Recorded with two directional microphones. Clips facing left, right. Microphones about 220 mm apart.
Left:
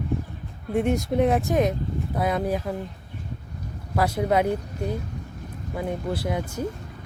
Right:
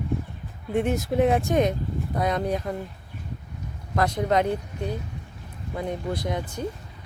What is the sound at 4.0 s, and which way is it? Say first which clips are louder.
Speech: left 1 dB; 10° left (ahead or behind).